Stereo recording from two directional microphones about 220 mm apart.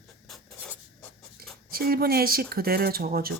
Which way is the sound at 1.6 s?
45° right (ahead or behind).